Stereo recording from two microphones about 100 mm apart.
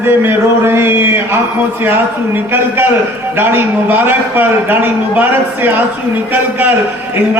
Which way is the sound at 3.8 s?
20° right (ahead or behind).